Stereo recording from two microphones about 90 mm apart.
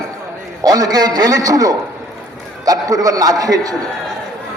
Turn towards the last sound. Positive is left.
turn(degrees=-45)  # may be behind; listen again after turning